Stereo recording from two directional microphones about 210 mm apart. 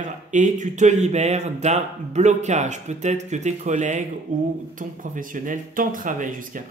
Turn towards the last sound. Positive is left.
turn(degrees=-40)  # may be behind; listen again after turning